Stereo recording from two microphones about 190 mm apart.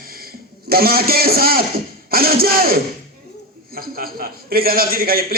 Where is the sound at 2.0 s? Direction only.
50° right (ahead or behind).